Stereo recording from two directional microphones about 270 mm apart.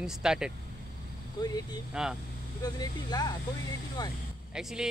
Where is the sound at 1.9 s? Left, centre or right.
Centre.